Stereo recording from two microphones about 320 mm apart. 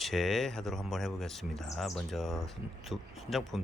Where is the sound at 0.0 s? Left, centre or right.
Centre.